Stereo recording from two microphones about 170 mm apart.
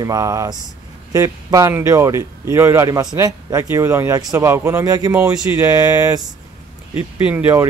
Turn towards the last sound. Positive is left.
turn(degrees=-15)  # may be behind; listen again after turning